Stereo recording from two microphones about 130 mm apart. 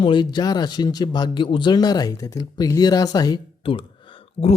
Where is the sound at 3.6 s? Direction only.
40° left (ahead or behind).